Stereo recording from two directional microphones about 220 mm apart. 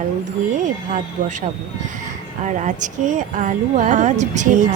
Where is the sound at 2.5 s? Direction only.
35° right (ahead or behind).